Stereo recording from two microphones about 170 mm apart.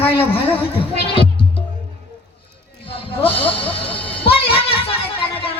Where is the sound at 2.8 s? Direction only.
35° left (ahead or behind).